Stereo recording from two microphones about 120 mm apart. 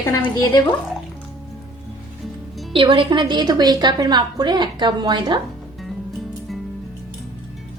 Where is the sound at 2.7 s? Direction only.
45° right (ahead or behind).